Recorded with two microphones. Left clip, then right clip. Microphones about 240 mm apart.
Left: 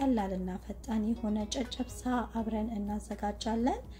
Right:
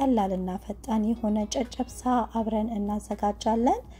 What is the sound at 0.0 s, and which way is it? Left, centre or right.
A woman's voice, right.